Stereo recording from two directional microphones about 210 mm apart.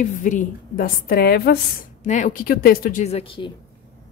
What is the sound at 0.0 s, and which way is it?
A woman's voice, 35° left (ahead or behind).